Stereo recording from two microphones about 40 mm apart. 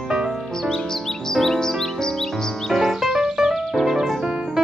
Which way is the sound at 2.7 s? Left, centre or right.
Centre.